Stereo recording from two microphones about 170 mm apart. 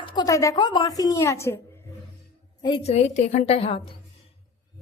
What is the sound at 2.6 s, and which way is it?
A child's voice, 30° left (ahead or behind).